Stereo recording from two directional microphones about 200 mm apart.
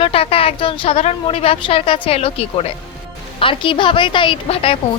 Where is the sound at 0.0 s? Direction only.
30° left (ahead or behind).